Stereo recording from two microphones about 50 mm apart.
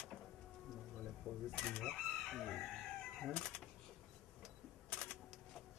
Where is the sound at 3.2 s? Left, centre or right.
Centre.